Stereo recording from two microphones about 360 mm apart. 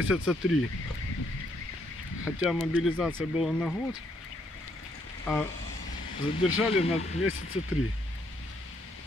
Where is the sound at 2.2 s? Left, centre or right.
Centre.